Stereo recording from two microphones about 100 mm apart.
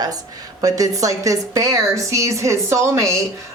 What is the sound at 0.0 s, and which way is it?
A woman's voice, 40° right (ahead or behind).